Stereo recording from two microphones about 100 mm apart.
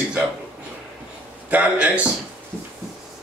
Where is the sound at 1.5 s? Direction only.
15° right (ahead or behind).